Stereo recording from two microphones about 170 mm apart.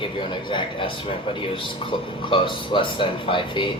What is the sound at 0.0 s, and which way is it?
A man's voice, 30° left (ahead or behind).